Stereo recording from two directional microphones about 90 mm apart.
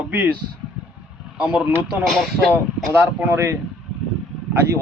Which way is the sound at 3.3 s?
30° right (ahead or behind).